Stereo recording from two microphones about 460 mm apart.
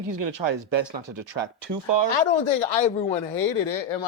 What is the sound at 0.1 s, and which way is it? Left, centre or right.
Speech, right.